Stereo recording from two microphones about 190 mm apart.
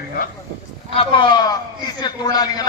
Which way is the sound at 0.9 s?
25° left (ahead or behind).